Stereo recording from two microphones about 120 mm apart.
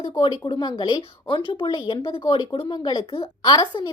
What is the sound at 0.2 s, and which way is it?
Speech, 40° left (ahead or behind).